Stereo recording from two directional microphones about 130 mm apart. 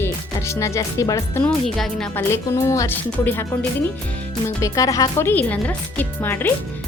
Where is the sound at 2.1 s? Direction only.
20° left (ahead or behind).